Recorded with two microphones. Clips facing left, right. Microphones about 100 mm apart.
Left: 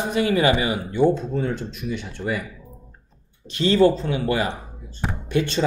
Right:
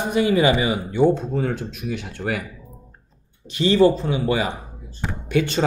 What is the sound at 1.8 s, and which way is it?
Speech, 90° right.